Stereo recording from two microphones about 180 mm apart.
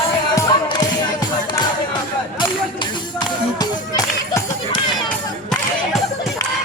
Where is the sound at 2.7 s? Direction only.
25° left (ahead or behind).